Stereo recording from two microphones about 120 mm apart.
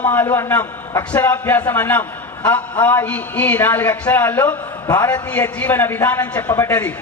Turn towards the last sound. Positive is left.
turn(degrees=15)  # may be behind; listen again after turning